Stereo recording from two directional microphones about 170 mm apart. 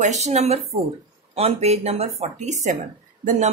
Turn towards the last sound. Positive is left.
turn(degrees=-45)  # may be behind; listen again after turning